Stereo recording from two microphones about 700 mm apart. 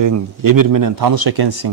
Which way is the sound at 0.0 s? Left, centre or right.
Right.